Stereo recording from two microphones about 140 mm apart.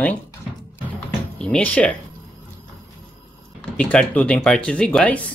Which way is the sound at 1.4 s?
10° left (ahead or behind).